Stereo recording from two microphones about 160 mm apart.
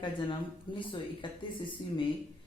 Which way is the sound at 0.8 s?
30° left (ahead or behind).